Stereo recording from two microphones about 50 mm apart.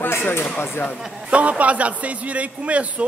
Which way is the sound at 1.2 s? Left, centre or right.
Right.